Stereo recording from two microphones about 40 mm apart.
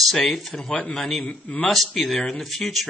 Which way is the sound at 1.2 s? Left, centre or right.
Left.